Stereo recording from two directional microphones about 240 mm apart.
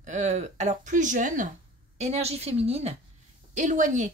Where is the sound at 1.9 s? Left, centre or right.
Right.